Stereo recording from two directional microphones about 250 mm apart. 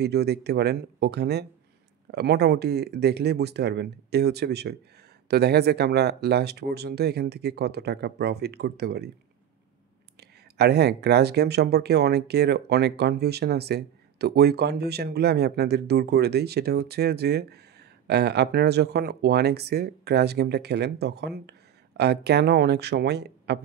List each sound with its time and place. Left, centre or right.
0.0 s speech: right
10.6 s speech: right